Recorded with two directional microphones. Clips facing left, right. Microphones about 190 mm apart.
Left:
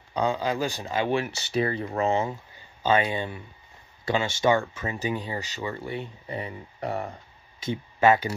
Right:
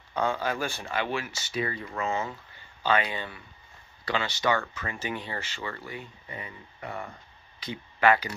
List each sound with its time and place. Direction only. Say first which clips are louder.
0.1 s speech: left 3 dB; 15° left (ahead or behind)
1.1 s speech: left 6 dB; 35° left (ahead or behind)
2.9 s speech: left 4 dB; 20° left (ahead or behind)
5.0 s speech: left 4 dB; 15° left (ahead or behind)
5.9 s speech: left 7 dB; 35° left (ahead or behind)
7.6 s speech: left 3 dB; 20° left (ahead or behind)